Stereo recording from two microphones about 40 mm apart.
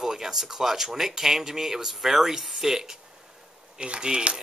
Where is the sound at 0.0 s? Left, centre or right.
Centre.